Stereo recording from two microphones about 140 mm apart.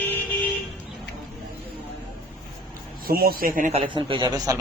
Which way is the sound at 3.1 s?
90° right.